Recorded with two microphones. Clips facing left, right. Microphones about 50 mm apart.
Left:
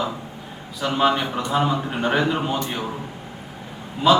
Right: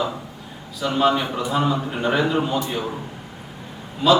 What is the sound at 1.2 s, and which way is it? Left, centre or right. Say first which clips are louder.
A man's voice: even; centre.